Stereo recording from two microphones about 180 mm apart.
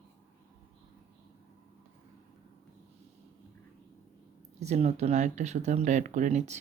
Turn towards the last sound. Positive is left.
turn(degrees=-40)  # may be behind; listen again after turning